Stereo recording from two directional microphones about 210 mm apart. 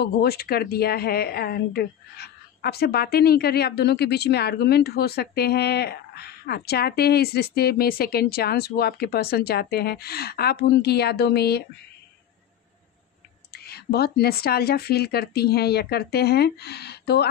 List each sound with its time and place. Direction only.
0.0 s a woman's voice: 50° left (ahead or behind)
13.5 s a woman's voice: 50° left (ahead or behind)